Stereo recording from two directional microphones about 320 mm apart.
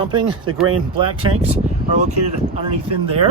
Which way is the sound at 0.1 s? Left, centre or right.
Centre.